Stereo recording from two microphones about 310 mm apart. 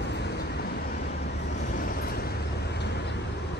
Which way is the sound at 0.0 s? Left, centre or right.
Left.